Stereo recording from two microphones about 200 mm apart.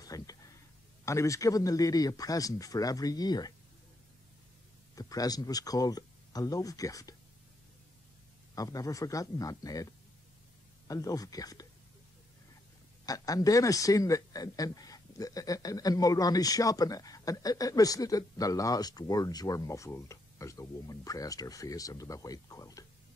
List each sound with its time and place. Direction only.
0.0 s a sound: 20° left (ahead or behind)
1.0 s speech: 15° left (ahead or behind)
4.9 s speech: 20° left (ahead or behind)
8.5 s speech: 15° left (ahead or behind)
10.9 s speech: 15° left (ahead or behind)
13.0 s speech: 20° left (ahead or behind)